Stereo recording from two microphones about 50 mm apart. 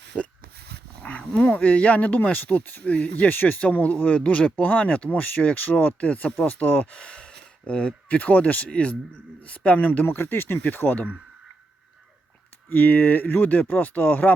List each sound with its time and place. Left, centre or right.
1.3 s speech: left
4.5 s speech: left
8.2 s speech: left
10.2 s speech: left
10.6 s speech: left
12.7 s speech: left